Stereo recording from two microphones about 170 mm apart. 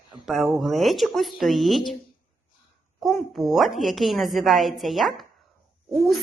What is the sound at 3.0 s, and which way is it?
Speech, centre (ahead or behind).